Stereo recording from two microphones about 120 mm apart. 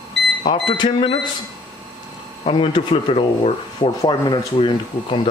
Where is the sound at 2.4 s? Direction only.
45° left (ahead or behind).